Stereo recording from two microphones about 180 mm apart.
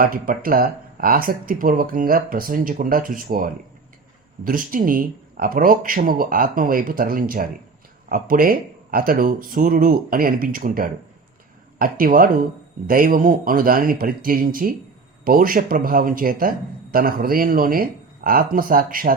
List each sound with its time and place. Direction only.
0.0 s a man's voice: 55° right (ahead or behind)